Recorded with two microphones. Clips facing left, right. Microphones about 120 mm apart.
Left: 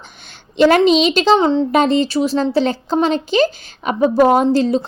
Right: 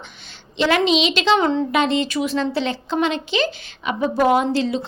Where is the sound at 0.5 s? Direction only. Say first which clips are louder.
Left 6 dB; 45° left (ahead or behind); by 1.6 s 25° left (ahead or behind).